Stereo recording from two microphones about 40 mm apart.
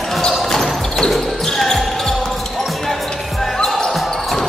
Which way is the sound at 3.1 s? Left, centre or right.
Centre.